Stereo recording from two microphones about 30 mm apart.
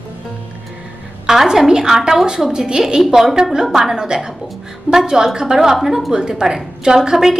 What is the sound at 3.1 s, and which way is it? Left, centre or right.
Speech, centre.